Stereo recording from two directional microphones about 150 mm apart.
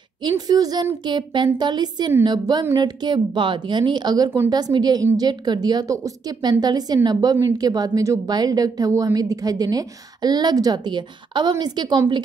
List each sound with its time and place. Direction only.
0.2 s a woman's voice: 25° right (ahead or behind)